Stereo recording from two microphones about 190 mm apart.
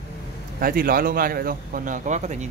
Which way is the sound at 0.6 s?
50° right (ahead or behind).